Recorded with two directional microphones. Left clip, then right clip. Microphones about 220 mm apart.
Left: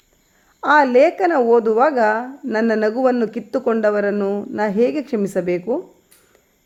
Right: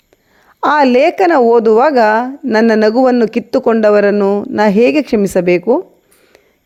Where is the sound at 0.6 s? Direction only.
35° right (ahead or behind).